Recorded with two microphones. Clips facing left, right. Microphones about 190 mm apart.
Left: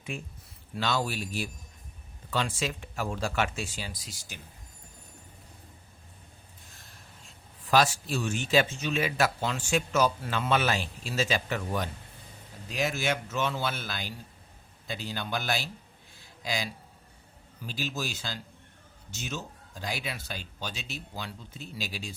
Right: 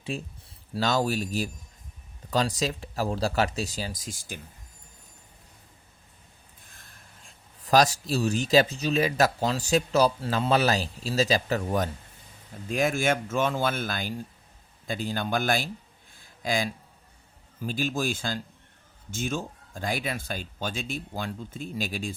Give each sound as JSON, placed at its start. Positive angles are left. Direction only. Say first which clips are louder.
{"t": 0.1, "sound": "speech", "louder": "right 5 dB", "side_deg": -35}
{"t": 6.7, "sound": "speech", "louder": "even", "side_deg": -50}
{"t": 16.1, "sound": "a sound", "louder": "right 6 dB", "side_deg": -50}
{"t": 17.6, "sound": "speech", "louder": "right 6 dB", "side_deg": -50}